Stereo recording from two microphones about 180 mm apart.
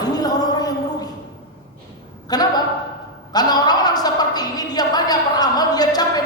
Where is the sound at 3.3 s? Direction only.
20° left (ahead or behind).